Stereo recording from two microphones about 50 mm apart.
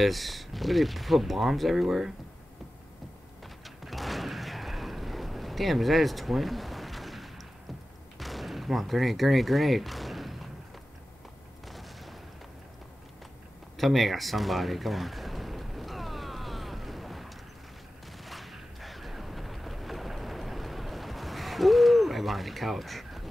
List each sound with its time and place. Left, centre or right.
0.0 s speech: centre
3.4 s a sound: centre
8.2 s artillery fire: centre
11.6 s boom: centre
13.7 s a sound: centre
18.1 s gunshot: centre